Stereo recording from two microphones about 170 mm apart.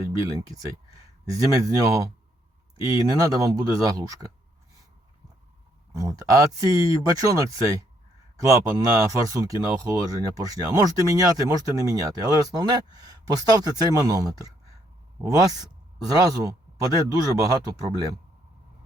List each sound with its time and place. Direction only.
0.3 s speech: 20° right (ahead or behind)
5.9 s speech: 20° right (ahead or behind)